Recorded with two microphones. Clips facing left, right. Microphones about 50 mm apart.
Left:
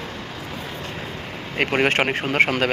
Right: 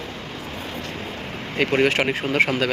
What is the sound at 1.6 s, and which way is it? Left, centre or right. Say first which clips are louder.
Speech: even; left.